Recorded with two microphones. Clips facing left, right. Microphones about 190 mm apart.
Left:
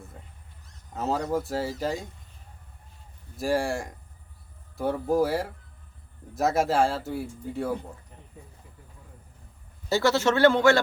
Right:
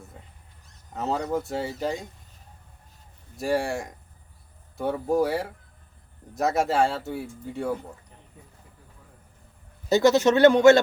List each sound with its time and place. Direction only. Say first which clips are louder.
0.9 s speech: even; centre (ahead or behind)
3.3 s speech: even; centre (ahead or behind)
9.9 s speech: right 4 dB; 20° right (ahead or behind)